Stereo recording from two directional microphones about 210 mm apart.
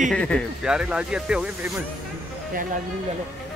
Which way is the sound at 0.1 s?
5° left (ahead or behind).